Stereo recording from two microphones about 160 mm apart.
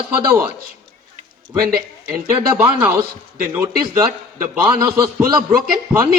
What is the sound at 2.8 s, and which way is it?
A man's voice, 20° right (ahead or behind).